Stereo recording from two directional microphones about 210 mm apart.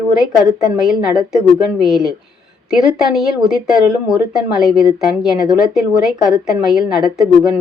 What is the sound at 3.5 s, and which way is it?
A woman's voice, 5° right (ahead or behind).